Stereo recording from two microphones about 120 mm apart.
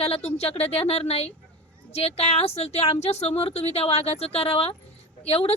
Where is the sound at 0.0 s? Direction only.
60° left (ahead or behind).